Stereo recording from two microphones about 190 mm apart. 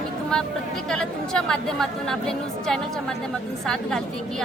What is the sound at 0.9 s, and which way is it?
Speech, 5° left (ahead or behind).